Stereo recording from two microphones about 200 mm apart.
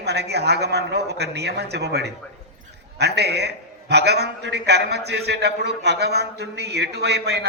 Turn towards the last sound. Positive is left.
turn(degrees=-55)  # may be behind; listen again after turning